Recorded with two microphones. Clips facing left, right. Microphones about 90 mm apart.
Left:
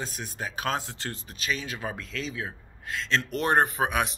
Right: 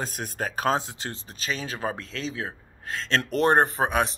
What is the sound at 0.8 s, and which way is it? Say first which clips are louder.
Speech: right 3 dB; 20° right (ahead or behind).